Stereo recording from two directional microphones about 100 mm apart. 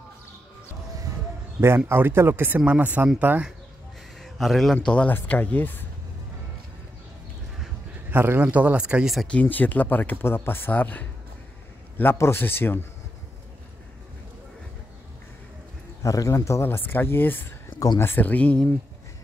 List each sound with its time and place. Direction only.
1.9 s speech: 25° right (ahead or behind)
4.2 s a sound: centre (ahead or behind)
4.8 s speech: 10° left (ahead or behind)
8.1 s speech: 20° right (ahead or behind)
9.3 s speech: 15° left (ahead or behind)
16.0 s speech: 35° left (ahead or behind); by 18.7 s 15° left (ahead or behind)